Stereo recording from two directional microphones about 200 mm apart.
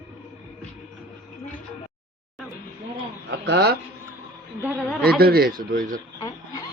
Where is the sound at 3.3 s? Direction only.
55° right (ahead or behind).